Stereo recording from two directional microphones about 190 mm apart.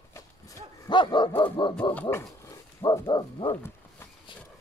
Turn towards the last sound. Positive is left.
turn(degrees=10)  # may be behind; listen again after turning